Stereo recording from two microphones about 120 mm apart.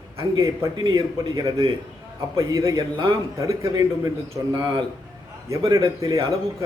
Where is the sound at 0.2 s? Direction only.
30° right (ahead or behind).